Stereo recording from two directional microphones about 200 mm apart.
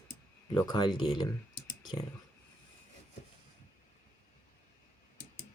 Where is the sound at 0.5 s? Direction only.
20° left (ahead or behind).